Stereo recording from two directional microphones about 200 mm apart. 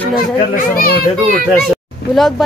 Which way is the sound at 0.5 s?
45° left (ahead or behind).